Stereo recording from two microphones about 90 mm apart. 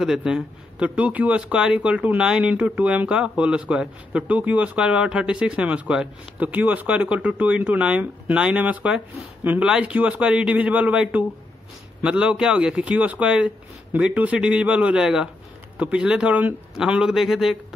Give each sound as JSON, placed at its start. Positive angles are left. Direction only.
{"t": 0.0, "sound": "a man's voice", "side_deg": -5}